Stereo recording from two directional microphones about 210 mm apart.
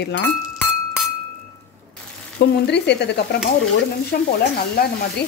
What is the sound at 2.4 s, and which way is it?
Speech, 55° left (ahead or behind).